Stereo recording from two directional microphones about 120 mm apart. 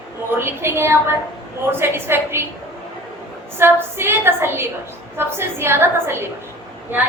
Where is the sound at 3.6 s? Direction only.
20° right (ahead or behind).